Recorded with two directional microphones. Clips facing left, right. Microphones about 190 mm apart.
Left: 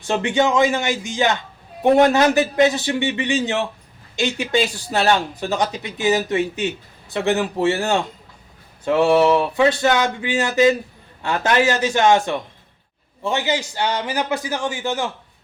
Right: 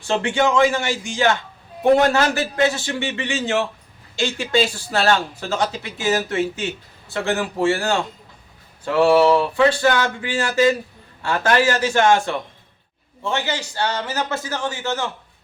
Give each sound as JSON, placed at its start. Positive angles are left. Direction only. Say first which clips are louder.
{"t": 0.0, "sound": "speech", "louder": "left 1 dB", "side_deg": 15}
{"t": 8.8, "sound": "a sound", "louder": "even", "side_deg": 20}
{"t": 13.2, "sound": "speech", "louder": "left 3 dB", "side_deg": 15}